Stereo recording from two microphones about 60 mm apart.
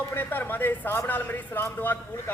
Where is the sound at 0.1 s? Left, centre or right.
Left.